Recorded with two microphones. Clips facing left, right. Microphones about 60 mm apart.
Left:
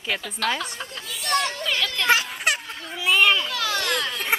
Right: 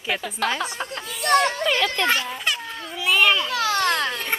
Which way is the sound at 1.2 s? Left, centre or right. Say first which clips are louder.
Right 6 dB; right.